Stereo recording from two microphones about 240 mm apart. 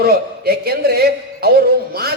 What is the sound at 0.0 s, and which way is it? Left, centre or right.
A man's voice, right.